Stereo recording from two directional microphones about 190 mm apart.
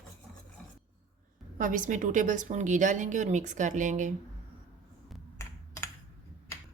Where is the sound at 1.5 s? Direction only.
45° right (ahead or behind).